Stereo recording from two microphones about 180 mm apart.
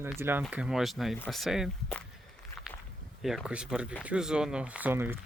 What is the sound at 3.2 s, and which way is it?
Speech, 5° right (ahead or behind).